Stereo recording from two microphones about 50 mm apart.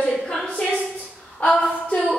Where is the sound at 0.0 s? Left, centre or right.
Centre.